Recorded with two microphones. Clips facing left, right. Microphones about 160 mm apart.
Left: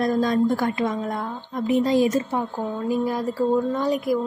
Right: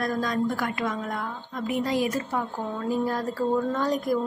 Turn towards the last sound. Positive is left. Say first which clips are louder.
# left 3 dB
turn(degrees=10)  # may be behind; listen again after turning